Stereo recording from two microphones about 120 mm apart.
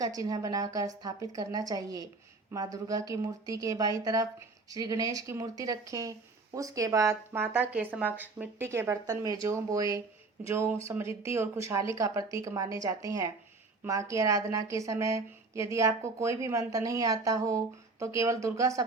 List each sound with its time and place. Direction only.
0.0 s a woman's voice: 30° right (ahead or behind)